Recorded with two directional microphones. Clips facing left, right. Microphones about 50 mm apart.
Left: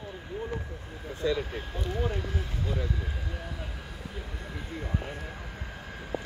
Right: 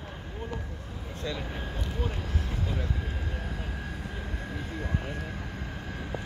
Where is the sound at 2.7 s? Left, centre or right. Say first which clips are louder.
Left 1 dB; centre.